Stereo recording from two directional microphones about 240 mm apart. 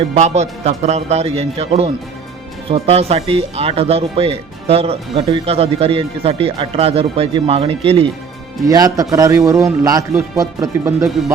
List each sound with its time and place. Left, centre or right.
0.1 s speech: right